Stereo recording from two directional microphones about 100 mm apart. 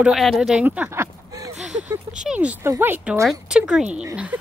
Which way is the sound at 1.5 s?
10° right (ahead or behind).